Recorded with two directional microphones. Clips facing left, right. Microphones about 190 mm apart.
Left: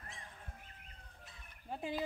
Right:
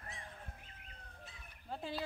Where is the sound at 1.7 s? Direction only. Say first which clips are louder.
Left 2 dB; 15° left (ahead or behind).